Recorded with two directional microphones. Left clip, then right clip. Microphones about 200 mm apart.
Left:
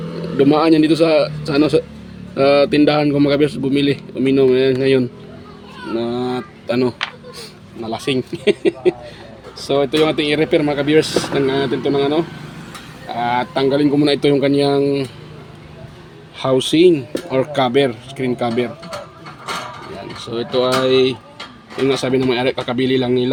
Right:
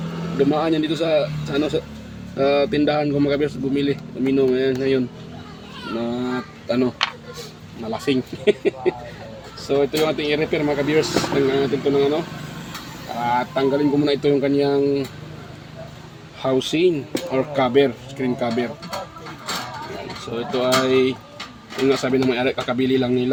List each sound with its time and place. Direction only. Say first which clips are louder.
0.3 s a man's voice: left 7 dB; 45° left (ahead or behind)
13.2 s a man's voice: left 3 dB; 50° left (ahead or behind)
16.4 s a man's voice: left 6 dB; 55° left (ahead or behind)
20.3 s a man's voice: left 3 dB; 50° left (ahead or behind)